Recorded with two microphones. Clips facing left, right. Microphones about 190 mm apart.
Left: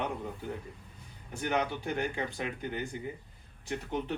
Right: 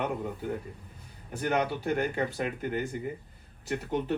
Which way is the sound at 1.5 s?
5° right (ahead or behind).